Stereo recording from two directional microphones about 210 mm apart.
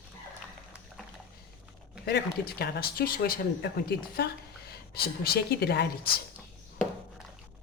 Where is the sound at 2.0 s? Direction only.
50° left (ahead or behind).